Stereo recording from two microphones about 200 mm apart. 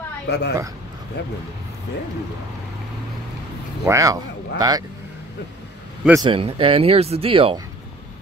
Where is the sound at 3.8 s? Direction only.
15° right (ahead or behind).